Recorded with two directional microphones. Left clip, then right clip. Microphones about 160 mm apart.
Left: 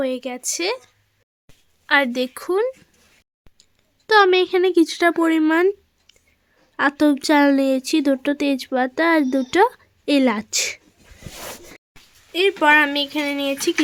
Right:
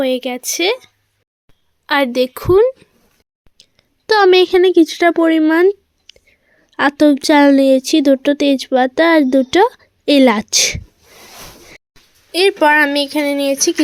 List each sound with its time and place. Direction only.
0.0 s speech: 20° right (ahead or behind)
1.9 s a woman's voice: 15° right (ahead or behind)
6.1 s whispering: 20° right (ahead or behind)
6.7 s speech: 15° right (ahead or behind)
12.3 s speech: 30° right (ahead or behind)